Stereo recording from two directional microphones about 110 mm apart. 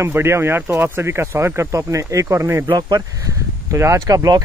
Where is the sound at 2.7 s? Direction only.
40° right (ahead or behind).